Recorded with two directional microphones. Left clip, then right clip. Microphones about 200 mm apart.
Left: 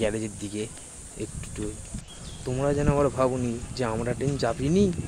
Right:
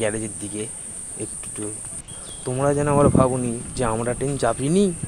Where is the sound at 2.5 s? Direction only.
15° right (ahead or behind).